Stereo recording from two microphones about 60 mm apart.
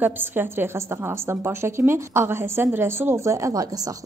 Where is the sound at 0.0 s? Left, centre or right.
Right.